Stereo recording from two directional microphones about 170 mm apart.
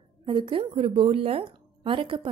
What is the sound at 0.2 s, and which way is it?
A woman's voice, 30° right (ahead or behind).